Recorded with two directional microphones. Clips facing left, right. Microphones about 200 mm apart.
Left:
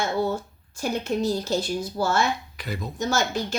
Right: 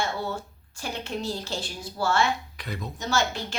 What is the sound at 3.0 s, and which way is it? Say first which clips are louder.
Speech: left 3 dB; 45° left (ahead or behind).